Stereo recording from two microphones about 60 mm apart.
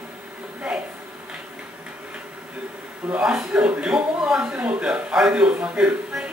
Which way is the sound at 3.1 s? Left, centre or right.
Centre.